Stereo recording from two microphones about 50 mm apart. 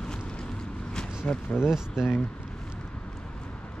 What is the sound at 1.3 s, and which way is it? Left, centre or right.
Speech, left.